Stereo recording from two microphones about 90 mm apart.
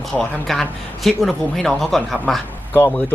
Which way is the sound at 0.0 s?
Centre (ahead or behind).